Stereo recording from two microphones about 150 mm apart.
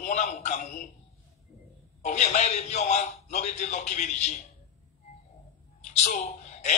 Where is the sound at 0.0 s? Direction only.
50° left (ahead or behind).